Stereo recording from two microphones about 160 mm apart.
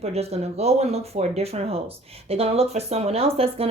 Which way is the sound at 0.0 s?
40° right (ahead or behind).